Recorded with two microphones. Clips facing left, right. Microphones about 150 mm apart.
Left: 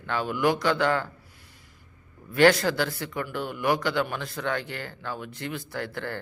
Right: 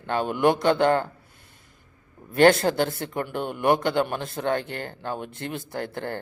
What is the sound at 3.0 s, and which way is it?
Speech, 50° right (ahead or behind).